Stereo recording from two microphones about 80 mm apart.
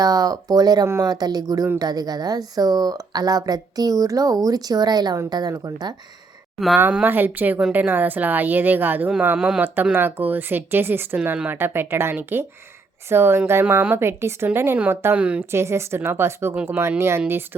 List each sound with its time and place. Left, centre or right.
0.0 s speech: right
7.0 s a woman's voice: right
15.1 s a woman's voice: centre
15.5 s a woman's voice: right